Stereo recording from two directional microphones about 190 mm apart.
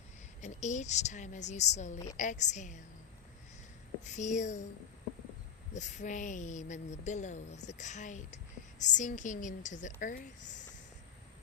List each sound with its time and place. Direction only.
0.4 s speech: 40° left (ahead or behind)
4.0 s speech: 40° left (ahead or behind)
5.7 s speech: 40° left (ahead or behind)